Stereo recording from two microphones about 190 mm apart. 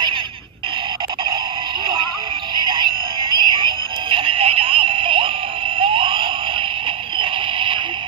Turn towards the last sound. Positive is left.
turn(degrees=-25)  # may be behind; listen again after turning